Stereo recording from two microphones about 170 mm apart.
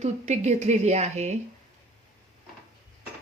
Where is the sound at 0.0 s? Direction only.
40° right (ahead or behind).